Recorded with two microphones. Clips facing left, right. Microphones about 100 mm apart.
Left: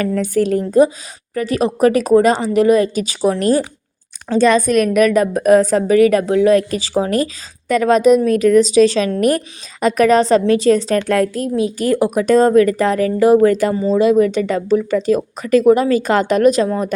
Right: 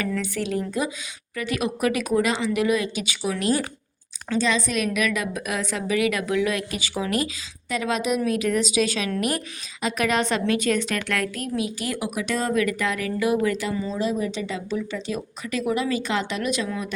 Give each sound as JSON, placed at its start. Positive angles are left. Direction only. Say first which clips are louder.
{"t": 0.0, "sound": "a woman's voice", "louder": "left 10 dB", "side_deg": 45}
{"t": 4.4, "sound": "a woman's voice", "louder": "left 11 dB", "side_deg": 50}
{"t": 14.0, "sound": "speech", "louder": "left 14 dB", "side_deg": 70}